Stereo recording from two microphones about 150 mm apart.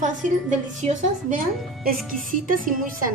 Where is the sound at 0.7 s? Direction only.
55° right (ahead or behind).